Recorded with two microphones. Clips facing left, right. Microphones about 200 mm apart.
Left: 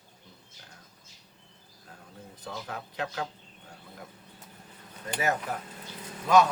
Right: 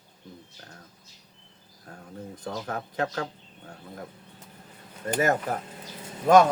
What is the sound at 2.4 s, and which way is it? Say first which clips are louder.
Speech: right 5 dB; 45° right (ahead or behind).